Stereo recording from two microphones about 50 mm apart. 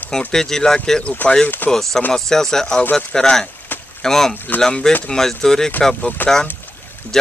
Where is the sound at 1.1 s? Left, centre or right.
Left.